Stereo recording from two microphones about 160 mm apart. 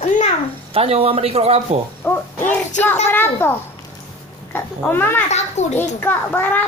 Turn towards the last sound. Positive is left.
turn(degrees=10)  # may be behind; listen again after turning